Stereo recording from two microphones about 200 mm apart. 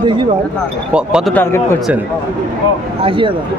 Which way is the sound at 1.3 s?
10° left (ahead or behind).